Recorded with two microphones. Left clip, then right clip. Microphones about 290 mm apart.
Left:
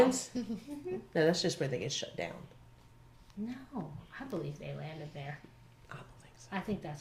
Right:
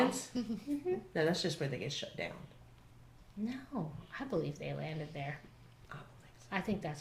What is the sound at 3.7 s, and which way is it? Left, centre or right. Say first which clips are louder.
Speech: right 2 dB; right.